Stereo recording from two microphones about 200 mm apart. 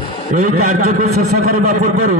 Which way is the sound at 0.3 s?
40° right (ahead or behind).